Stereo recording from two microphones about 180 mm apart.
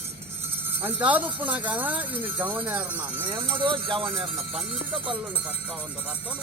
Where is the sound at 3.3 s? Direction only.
30° right (ahead or behind).